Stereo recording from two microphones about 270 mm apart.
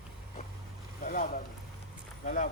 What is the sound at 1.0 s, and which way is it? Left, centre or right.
Speech, left.